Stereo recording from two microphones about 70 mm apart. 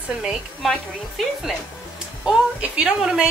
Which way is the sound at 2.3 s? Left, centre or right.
Centre.